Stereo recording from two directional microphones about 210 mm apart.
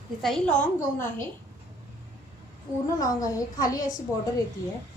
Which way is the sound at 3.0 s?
15° left (ahead or behind).